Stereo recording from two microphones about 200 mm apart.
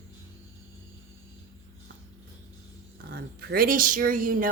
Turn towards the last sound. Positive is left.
turn(degrees=-45)  # may be behind; listen again after turning